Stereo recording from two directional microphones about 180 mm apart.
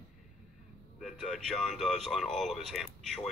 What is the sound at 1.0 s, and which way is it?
Speech, centre (ahead or behind).